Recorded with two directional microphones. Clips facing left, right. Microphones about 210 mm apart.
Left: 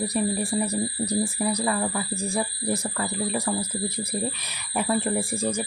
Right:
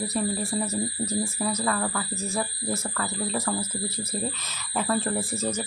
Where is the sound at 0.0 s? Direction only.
15° left (ahead or behind).